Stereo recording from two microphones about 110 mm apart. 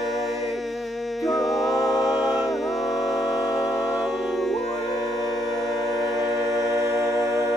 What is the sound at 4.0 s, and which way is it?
Music, centre (ahead or behind).